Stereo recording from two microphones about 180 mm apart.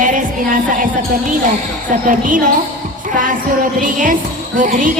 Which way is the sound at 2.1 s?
45° right (ahead or behind).